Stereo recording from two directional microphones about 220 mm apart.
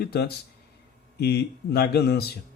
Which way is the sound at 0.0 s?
45° left (ahead or behind).